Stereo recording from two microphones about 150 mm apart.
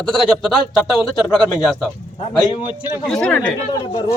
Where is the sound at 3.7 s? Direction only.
25° left (ahead or behind).